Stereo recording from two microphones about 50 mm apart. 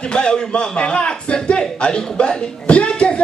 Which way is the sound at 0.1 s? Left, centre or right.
Centre.